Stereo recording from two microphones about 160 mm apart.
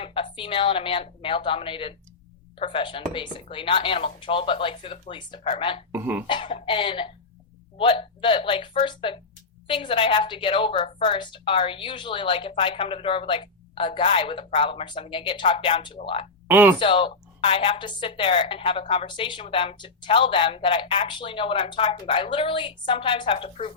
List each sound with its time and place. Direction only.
0.0 s a woman's voice: 30° left (ahead or behind)
5.9 s speech: 15° right (ahead or behind)
6.2 s a woman's voice: 30° left (ahead or behind)
16.5 s speech: 10° right (ahead or behind)
16.8 s a woman's voice: 35° left (ahead or behind)